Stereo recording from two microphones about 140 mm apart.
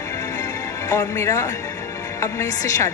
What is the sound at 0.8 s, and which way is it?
Speech, 20° left (ahead or behind).